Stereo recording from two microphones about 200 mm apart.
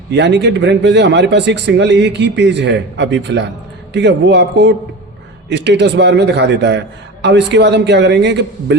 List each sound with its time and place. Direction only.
0.1 s a man's voice: 60° right (ahead or behind)